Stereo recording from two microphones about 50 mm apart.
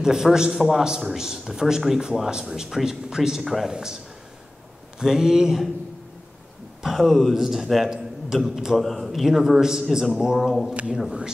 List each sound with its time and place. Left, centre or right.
0.0 s a man's voice: centre
6.8 s a man's voice: centre
7.3 s a man's voice: centre
10.7 s a man's voice: right